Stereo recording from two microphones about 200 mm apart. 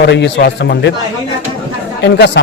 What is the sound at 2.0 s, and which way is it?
Speech, 60° left (ahead or behind).